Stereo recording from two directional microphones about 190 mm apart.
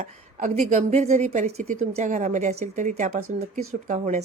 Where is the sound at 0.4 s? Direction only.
40° right (ahead or behind).